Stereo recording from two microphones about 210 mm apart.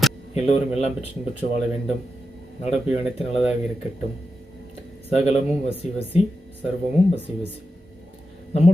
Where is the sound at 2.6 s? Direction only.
30° left (ahead or behind).